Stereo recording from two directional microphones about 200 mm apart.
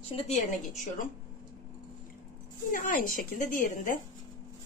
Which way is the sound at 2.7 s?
40° left (ahead or behind).